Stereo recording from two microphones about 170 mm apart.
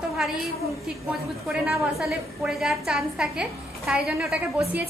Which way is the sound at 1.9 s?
Centre (ahead or behind).